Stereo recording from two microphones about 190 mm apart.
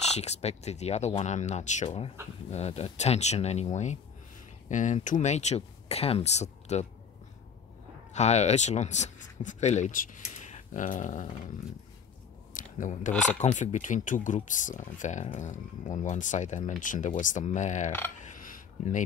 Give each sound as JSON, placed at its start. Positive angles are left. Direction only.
{"t": 0.2, "sound": "speech", "side_deg": 35}
{"t": 8.1, "sound": "speech", "side_deg": 35}
{"t": 12.5, "sound": "a sound", "side_deg": 40}
{"t": 13.1, "sound": "speech", "side_deg": 5}
{"t": 13.4, "sound": "speech", "side_deg": 40}
{"t": 18.3, "sound": "dishes", "side_deg": 45}